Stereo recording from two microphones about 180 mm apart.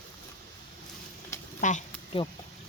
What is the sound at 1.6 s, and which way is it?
Speech, 45° left (ahead or behind).